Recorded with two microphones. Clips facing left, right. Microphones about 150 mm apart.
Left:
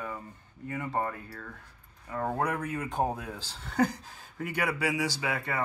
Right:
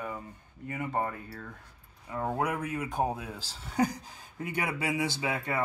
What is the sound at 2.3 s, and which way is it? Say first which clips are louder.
Speech: even; 5° right (ahead or behind).